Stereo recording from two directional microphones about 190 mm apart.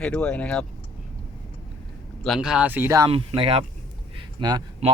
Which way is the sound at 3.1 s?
30° right (ahead or behind).